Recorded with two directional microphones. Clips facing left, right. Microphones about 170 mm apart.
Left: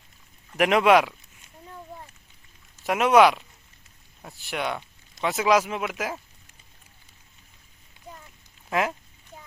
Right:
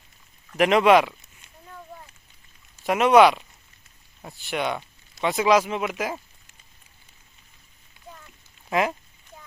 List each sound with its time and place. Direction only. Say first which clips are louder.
0.5 s speech: right 2 dB; 5° left (ahead or behind)
2.8 s speech: right 2 dB; 5° left (ahead or behind)
8.0 s a sound: left 1 dB; 30° left (ahead or behind)
8.7 s speech: right 2 dB; centre (ahead or behind)